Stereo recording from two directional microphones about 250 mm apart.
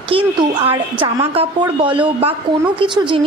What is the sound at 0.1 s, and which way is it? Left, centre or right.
Speech, right.